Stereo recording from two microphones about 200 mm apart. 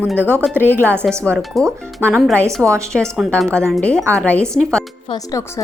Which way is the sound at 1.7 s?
10° right (ahead or behind).